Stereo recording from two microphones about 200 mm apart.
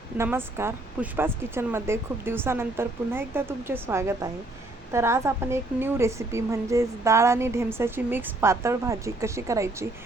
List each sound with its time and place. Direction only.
0.2 s a woman's voice: 10° right (ahead or behind)